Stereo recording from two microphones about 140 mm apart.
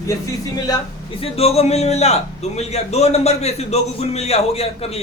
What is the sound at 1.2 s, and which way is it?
A man's voice, 45° left (ahead or behind).